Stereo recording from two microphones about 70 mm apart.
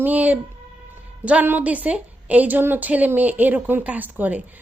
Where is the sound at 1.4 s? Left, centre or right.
Right.